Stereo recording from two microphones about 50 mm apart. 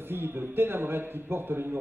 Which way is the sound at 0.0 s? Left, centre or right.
Right.